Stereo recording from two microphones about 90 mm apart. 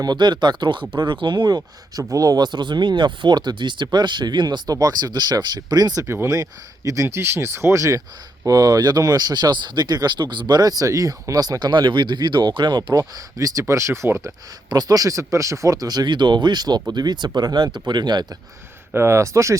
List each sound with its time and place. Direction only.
0.0 s speech: 50° right (ahead or behind)
2.0 s speech: 40° right (ahead or behind)
8.4 s speech: 45° right (ahead or behind); by 14.3 s 30° right (ahead or behind)
14.7 s speech: 45° right (ahead or behind)
18.9 s speech: 30° right (ahead or behind)